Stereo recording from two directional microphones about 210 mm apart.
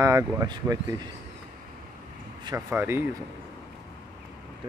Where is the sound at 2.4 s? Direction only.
10° right (ahead or behind).